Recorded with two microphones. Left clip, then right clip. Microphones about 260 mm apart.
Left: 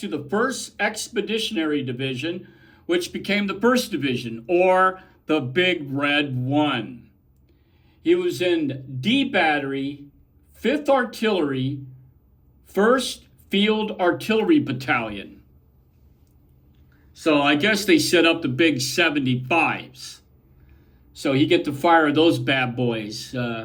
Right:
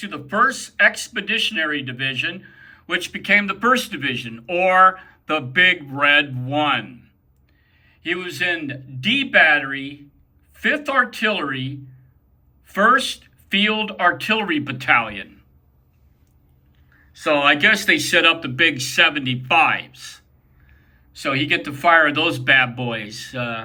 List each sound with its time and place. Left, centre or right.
0.3 s speech: centre
8.0 s speech: centre
10.5 s a sound: centre
10.8 s speech: centre
16.9 s speech: centre
21.2 s speech: centre